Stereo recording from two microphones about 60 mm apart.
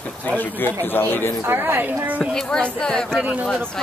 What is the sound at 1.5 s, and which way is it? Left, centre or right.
Speech, right.